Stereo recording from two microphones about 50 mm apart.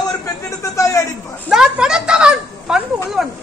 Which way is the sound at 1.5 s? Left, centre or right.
Centre.